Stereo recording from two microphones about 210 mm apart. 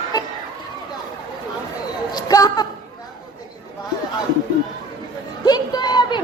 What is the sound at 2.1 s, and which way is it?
Speech, 20° left (ahead or behind).